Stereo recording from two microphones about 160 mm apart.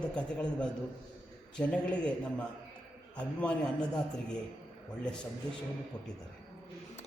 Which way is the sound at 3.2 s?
5° left (ahead or behind).